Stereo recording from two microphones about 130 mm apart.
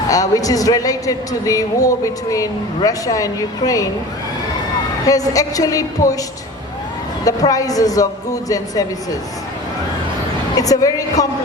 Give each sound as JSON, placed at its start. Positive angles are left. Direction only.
{"t": 0.1, "sound": "speech", "side_deg": 25}
{"t": 5.0, "sound": "speech", "side_deg": 25}
{"t": 7.3, "sound": "speech", "side_deg": 25}
{"t": 10.6, "sound": "speech", "side_deg": 25}